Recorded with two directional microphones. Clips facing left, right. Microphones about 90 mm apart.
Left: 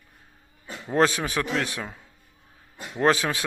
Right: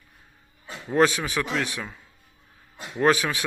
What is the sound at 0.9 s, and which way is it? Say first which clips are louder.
A man's voice: right 1 dB; 35° left (ahead or behind).